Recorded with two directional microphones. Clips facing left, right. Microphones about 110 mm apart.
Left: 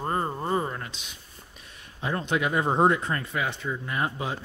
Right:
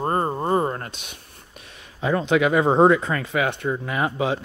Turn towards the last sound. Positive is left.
turn(degrees=-90)